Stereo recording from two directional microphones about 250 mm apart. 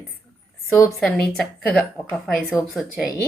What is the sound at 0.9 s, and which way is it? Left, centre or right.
A woman's voice, centre.